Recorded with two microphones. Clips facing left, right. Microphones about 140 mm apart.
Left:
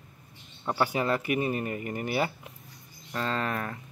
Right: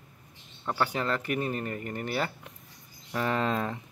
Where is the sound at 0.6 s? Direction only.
15° left (ahead or behind).